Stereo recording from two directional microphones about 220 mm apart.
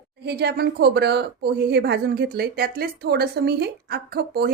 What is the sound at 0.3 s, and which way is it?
A woman's voice, 50° right (ahead or behind).